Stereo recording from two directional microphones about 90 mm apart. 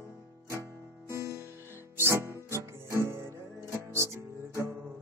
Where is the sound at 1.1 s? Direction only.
30° right (ahead or behind).